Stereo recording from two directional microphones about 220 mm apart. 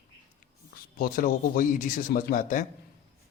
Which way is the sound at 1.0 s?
40° left (ahead or behind).